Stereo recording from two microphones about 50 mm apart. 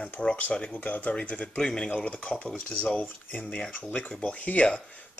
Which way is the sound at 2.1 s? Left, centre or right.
Left.